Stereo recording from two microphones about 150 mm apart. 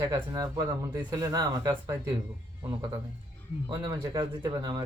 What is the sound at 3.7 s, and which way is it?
Speech, 30° right (ahead or behind).